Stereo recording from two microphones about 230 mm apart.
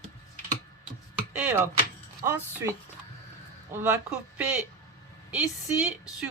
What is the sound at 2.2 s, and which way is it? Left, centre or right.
A woman's voice, centre.